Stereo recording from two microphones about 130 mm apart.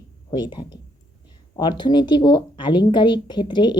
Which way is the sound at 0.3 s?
35° left (ahead or behind).